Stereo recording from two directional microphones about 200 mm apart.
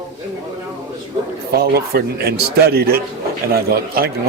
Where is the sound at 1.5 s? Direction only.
50° right (ahead or behind).